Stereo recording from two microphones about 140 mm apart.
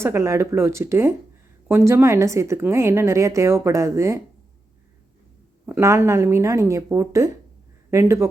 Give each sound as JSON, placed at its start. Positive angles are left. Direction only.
{"t": 0.0, "sound": "a woman's voice", "side_deg": -20}
{"t": 5.6, "sound": "a woman's voice", "side_deg": -20}